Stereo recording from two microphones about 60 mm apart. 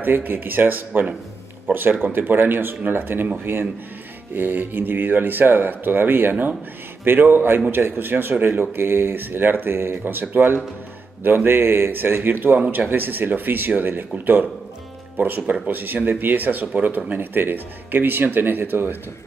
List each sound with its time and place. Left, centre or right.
0.0 s speech: right